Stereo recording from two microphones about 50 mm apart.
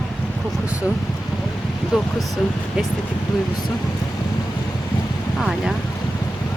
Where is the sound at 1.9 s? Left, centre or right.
Centre.